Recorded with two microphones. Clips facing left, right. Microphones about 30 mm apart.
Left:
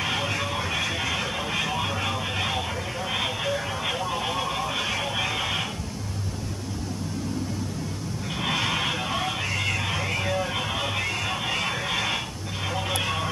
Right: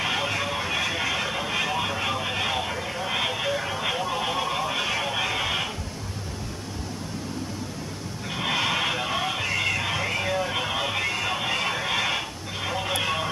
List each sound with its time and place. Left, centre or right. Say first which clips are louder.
0.0 s vehicle: right 1 dB; centre
8.4 s a sound: right 1 dB; centre
12.6 s vehicle: right 1 dB; centre